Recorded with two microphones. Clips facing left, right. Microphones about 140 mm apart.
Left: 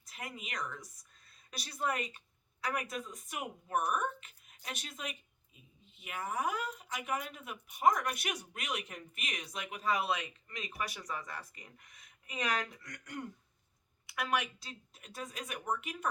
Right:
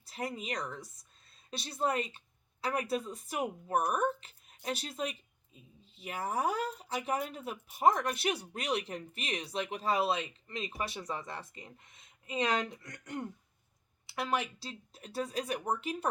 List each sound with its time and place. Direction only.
0.0 s speech: 35° right (ahead or behind)